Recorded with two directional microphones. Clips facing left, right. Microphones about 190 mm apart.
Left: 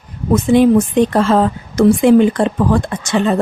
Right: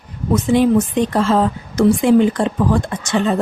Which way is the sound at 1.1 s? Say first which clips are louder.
Left 3 dB; 60° left (ahead or behind).